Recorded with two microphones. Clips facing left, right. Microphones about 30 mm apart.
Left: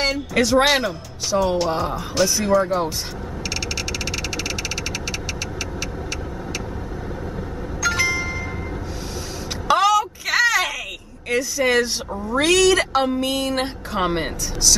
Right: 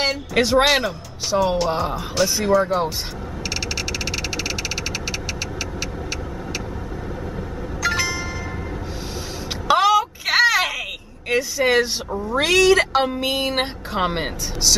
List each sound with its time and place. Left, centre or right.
0.0 s speech: centre
0.7 s speech: centre
4.0 s a sound: centre
7.8 s music: centre
9.7 s a sound: centre
11.2 s speech: centre
11.6 s speech: centre